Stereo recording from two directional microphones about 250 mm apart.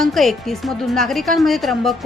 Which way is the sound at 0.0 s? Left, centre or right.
Centre.